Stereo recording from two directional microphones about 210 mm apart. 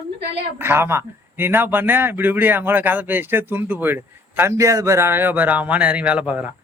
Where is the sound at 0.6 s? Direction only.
10° right (ahead or behind).